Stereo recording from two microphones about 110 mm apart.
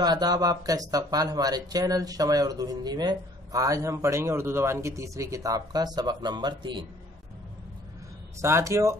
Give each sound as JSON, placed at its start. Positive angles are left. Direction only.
{"t": 0.0, "sound": "speech", "side_deg": -40}
{"t": 8.4, "sound": "speech", "side_deg": -25}